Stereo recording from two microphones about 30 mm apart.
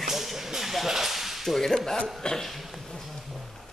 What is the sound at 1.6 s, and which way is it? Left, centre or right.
Speech, centre.